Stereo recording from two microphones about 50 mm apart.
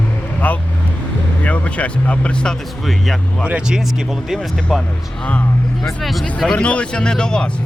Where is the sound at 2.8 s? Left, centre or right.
Centre.